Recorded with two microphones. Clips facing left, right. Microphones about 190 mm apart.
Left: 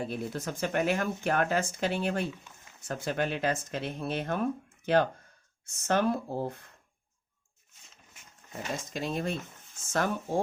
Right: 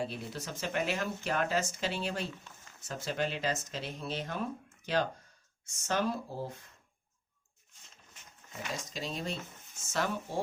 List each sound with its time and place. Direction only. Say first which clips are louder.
0.0 s speech: left 4 dB; 50° left (ahead or behind)
5.6 s speech: left 5 dB; 55° left (ahead or behind)
8.9 s speech: left 8 dB; 55° left (ahead or behind)